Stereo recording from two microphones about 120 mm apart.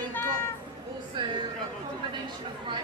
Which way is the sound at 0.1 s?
20° left (ahead or behind).